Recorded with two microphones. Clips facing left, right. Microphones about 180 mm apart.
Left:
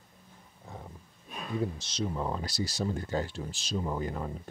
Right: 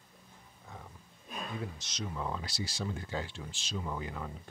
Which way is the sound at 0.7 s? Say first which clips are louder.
Left 4 dB; 30° left (ahead or behind).